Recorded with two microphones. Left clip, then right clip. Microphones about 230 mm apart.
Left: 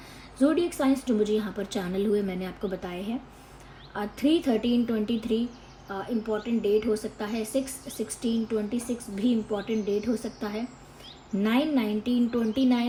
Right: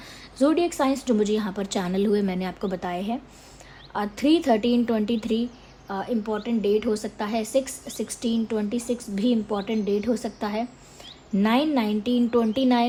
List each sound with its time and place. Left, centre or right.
0.3 s a woman's voice: right